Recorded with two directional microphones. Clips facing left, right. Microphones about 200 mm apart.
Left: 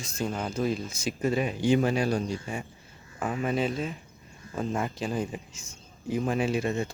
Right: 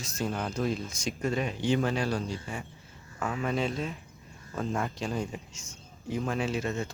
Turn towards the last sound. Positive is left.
turn(degrees=10)  # may be behind; listen again after turning